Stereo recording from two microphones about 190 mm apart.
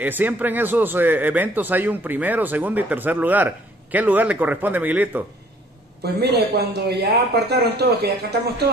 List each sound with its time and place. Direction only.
0.0 s speech: 10° right (ahead or behind)
6.0 s speech: 60° right (ahead or behind)